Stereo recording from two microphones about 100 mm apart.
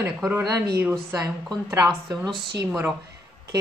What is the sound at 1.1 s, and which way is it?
Speech, 40° right (ahead or behind).